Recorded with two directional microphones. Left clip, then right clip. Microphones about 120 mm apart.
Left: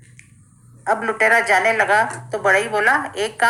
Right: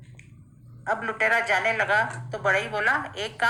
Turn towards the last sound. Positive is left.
turn(degrees=45)  # may be behind; listen again after turning